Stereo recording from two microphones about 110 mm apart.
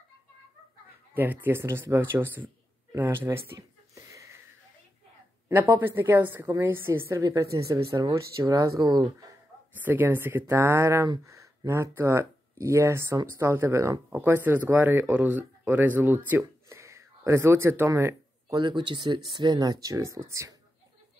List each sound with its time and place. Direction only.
1.1 s a man's voice: 15° right (ahead or behind)
3.5 s a sound: 30° right (ahead or behind)
5.5 s a man's voice: 15° right (ahead or behind); by 9.1 s 40° right (ahead or behind)
9.8 s a man's voice: 15° right (ahead or behind)
18.6 s speech: 45° right (ahead or behind); by 20.5 s 25° right (ahead or behind)